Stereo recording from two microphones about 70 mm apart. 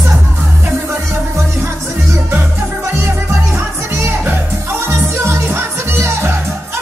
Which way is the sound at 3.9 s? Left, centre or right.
Right.